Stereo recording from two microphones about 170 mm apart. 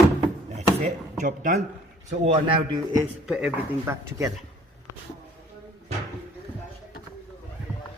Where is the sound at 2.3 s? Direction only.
40° right (ahead or behind).